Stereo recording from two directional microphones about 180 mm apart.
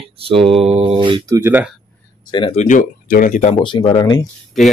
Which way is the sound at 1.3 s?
10° right (ahead or behind).